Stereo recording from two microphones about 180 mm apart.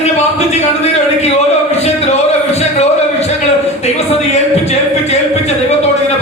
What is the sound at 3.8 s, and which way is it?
A man's voice, 35° left (ahead or behind).